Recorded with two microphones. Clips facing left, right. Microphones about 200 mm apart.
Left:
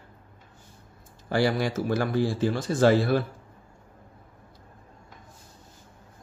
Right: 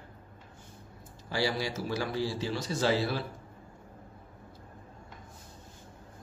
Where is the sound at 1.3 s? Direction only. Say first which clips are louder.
Left 7 dB; 55° left (ahead or behind).